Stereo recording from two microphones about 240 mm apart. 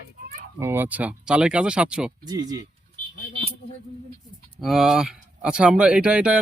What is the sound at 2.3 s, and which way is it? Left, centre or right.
Speech, centre.